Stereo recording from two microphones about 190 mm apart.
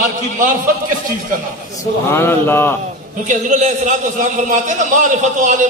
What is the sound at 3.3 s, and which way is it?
A man's voice, 40° right (ahead or behind).